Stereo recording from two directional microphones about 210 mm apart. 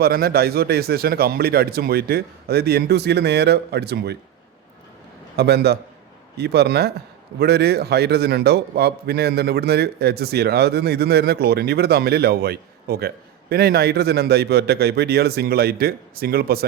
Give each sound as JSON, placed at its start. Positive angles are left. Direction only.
{"t": 0.0, "sound": "a man's voice", "side_deg": -45}
{"t": 5.4, "sound": "a man's voice", "side_deg": -50}